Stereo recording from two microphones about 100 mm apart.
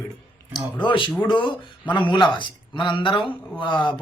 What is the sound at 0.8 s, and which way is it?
Speech, 55° left (ahead or behind).